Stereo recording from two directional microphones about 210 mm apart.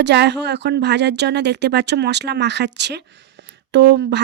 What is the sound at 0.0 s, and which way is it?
Speech, 55° right (ahead or behind).